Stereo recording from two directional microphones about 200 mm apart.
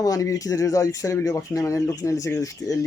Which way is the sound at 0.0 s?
15° left (ahead or behind).